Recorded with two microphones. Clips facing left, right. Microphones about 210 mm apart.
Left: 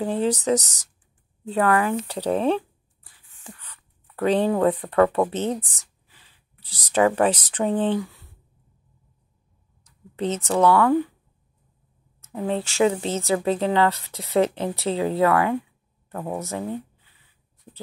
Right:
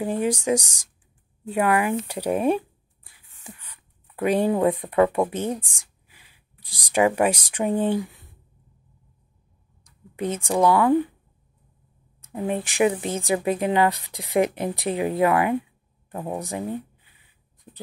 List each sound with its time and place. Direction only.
0.0 s speech: 10° right (ahead or behind)
9.8 s speech: 10° right (ahead or behind)
12.2 s speech: 15° right (ahead or behind)